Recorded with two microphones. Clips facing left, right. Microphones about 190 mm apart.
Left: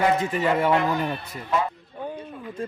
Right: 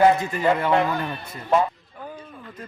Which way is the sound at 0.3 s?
5° left (ahead or behind).